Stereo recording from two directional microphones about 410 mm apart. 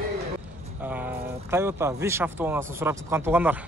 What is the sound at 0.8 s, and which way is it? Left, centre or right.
Speech, centre.